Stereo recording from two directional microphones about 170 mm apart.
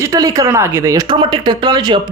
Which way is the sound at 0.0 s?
20° right (ahead or behind).